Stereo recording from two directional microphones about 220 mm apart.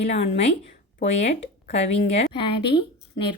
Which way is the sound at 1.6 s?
30° left (ahead or behind).